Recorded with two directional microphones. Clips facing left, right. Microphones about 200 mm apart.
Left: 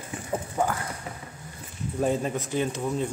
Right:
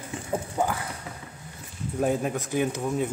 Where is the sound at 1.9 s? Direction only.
5° right (ahead or behind).